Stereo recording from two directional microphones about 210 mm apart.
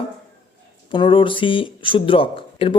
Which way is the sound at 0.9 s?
25° left (ahead or behind).